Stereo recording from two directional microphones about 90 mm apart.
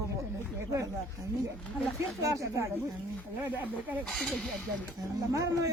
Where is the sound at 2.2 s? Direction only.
35° right (ahead or behind).